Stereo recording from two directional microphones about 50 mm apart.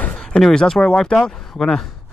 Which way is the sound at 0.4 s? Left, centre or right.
Centre.